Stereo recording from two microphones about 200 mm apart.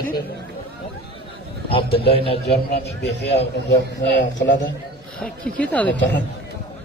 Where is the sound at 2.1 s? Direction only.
30° left (ahead or behind).